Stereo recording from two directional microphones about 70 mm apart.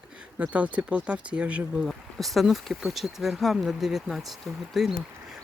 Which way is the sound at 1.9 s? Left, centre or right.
Centre.